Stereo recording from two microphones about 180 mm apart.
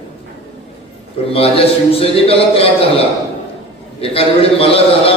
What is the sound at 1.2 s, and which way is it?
A man's voice, 30° left (ahead or behind).